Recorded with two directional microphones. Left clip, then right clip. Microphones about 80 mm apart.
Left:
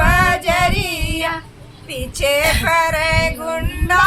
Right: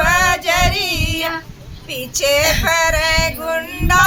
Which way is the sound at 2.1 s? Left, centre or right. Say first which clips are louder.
Right 1 dB; centre.